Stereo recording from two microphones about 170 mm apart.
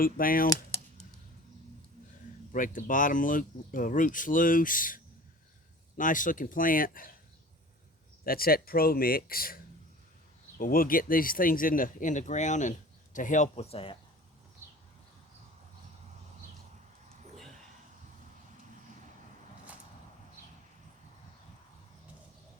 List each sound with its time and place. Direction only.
0.0 s speech: 55° left (ahead or behind)
2.5 s speech: 50° left (ahead or behind)
8.2 s speech: 60° left (ahead or behind)
10.6 s speech: 55° left (ahead or behind); by 13.9 s 35° left (ahead or behind)
14.6 s a sound: 15° right (ahead or behind)